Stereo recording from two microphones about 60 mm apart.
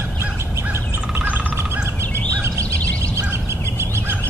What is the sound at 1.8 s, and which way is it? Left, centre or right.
Bird, right.